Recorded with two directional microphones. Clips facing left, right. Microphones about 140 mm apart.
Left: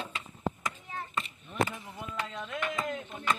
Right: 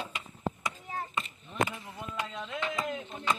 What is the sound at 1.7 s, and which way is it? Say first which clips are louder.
Speech: even; 15° right (ahead or behind).